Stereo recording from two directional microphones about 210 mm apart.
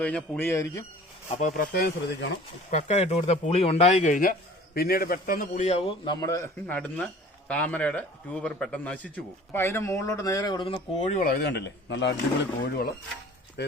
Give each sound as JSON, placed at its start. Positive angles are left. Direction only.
{"t": 0.0, "sound": "a man's voice", "side_deg": 5}
{"t": 1.4, "sound": "speech", "side_deg": 35}
{"t": 2.6, "sound": "speech", "side_deg": 35}
{"t": 6.1, "sound": "a man's voice", "side_deg": 15}
{"t": 11.1, "sound": "speech", "side_deg": 45}